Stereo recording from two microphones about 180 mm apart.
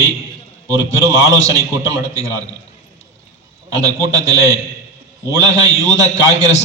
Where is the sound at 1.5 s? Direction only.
20° right (ahead or behind).